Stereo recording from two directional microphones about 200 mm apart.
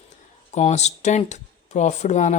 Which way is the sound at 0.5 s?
35° left (ahead or behind).